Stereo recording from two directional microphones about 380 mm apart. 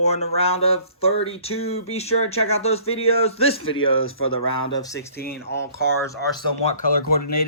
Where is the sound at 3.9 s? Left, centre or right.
Left.